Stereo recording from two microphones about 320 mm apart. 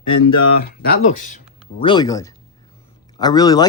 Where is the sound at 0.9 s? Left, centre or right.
Left.